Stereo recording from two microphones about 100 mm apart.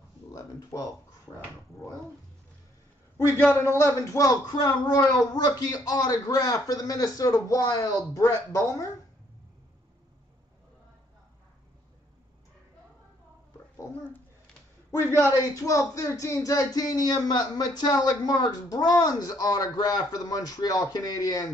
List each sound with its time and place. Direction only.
0.3 s speech: 35° left (ahead or behind)
3.3 s speech: 20° left (ahead or behind)
14.9 s speech: 30° left (ahead or behind)